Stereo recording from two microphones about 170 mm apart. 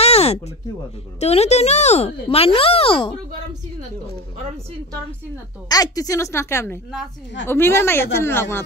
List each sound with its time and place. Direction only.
0.0 s a sound: 35° left (ahead or behind)
1.2 s speech: 40° left (ahead or behind)
5.7 s speech: 20° left (ahead or behind)